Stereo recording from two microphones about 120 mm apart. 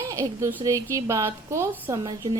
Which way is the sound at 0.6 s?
25° right (ahead or behind).